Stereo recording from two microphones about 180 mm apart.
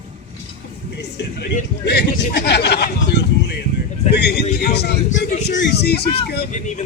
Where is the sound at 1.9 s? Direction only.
65° left (ahead or behind).